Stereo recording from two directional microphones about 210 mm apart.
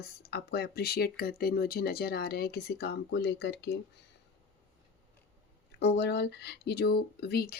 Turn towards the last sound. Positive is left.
turn(degrees=50)  # may be behind; listen again after turning